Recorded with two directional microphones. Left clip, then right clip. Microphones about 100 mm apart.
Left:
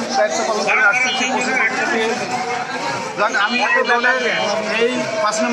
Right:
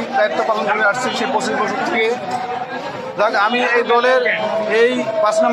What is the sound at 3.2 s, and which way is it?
A man's voice, 30° right (ahead or behind).